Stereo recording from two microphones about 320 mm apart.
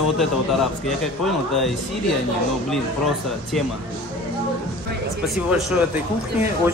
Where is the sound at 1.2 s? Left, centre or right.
Centre.